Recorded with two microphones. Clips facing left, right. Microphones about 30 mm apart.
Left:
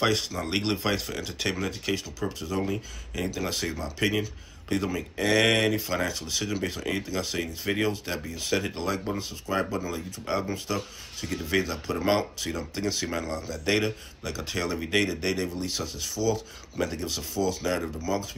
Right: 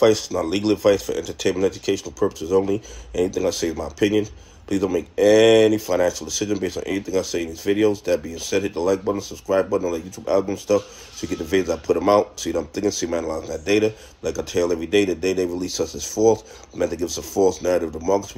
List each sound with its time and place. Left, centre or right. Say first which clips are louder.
0.0 s speech: right 9 dB; left
4.8 s speech: right 9 dB; centre
5.2 s speech: right 9 dB; left
7.7 s speech: right 8 dB; centre
8.3 s speech: right 5 dB; left